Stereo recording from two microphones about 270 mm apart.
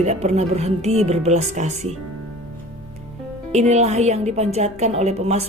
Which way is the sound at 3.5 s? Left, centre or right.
Right.